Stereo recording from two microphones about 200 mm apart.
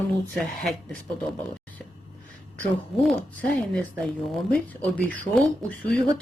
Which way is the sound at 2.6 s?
5° left (ahead or behind).